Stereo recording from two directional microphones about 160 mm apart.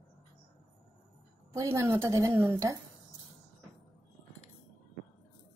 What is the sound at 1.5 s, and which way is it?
A woman's voice, 20° right (ahead or behind).